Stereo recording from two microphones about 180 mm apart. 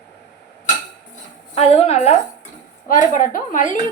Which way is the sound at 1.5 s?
35° left (ahead or behind).